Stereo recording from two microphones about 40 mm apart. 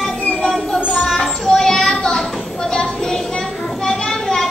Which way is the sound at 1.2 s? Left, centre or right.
Centre.